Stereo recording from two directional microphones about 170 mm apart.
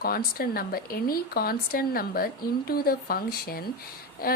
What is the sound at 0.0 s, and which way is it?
A woman's voice, 60° left (ahead or behind).